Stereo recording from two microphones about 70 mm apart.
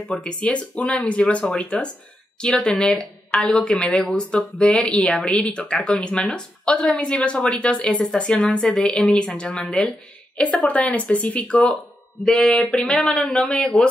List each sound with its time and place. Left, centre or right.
0.2 s a woman's voice: centre